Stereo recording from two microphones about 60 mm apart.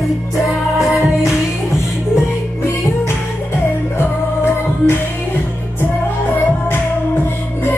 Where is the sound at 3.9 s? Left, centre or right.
Left.